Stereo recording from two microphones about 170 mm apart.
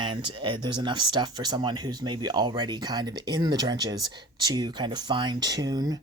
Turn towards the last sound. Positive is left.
turn(degrees=-20)  # may be behind; listen again after turning